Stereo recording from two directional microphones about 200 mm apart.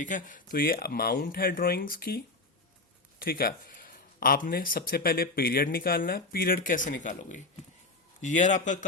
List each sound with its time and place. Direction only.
0.0 s speech: 40° left (ahead or behind)
3.2 s a man's voice: 50° left (ahead or behind)